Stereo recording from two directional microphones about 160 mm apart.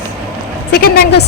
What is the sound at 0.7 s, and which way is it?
Speech, 85° left.